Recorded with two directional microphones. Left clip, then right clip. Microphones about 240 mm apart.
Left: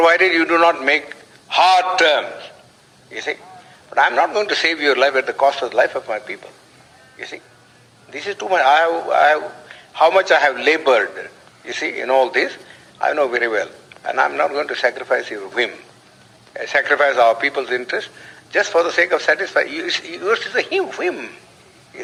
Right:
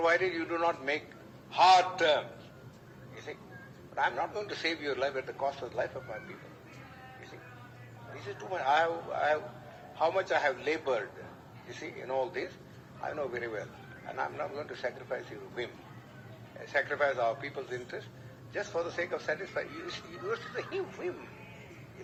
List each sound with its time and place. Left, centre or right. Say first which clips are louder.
0.0 s a man's voice: left 15 dB; left
3.9 s a man's voice: left 17 dB; left
8.1 s a man's voice: left 19 dB; left